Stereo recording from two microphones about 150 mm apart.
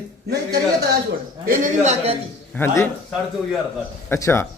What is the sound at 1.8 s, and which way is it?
Speech, 40° right (ahead or behind).